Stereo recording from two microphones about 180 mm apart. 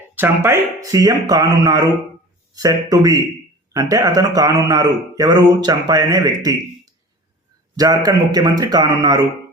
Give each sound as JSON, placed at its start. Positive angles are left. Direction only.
{"t": 0.2, "sound": "a man's voice", "side_deg": -15}